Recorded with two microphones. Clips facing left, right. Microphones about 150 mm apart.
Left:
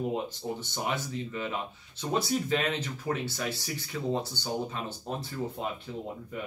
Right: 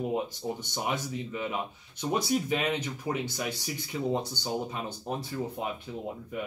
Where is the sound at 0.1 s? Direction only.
15° right (ahead or behind).